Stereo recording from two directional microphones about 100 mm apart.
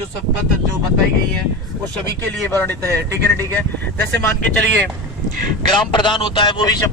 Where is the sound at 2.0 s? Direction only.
20° left (ahead or behind).